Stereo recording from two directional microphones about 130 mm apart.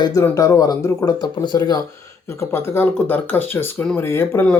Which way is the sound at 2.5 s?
15° left (ahead or behind).